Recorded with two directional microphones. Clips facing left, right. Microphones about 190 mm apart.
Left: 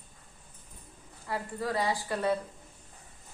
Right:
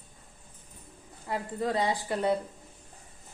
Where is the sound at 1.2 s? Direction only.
20° right (ahead or behind).